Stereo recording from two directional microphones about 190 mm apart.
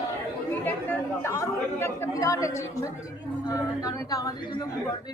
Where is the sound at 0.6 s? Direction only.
10° left (ahead or behind).